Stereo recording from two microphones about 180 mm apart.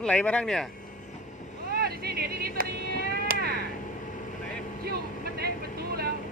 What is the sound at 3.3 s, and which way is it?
Cat, 60° right (ahead or behind).